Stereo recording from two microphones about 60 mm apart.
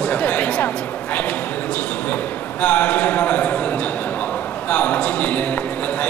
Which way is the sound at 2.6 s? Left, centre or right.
Left.